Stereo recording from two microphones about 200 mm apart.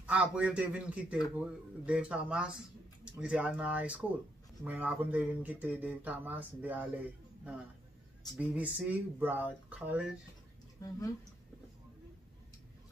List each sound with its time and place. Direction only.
0.0 s a man's voice: 5° right (ahead or behind)
8.4 s speech: 5° right (ahead or behind)
10.8 s speech: 15° left (ahead or behind)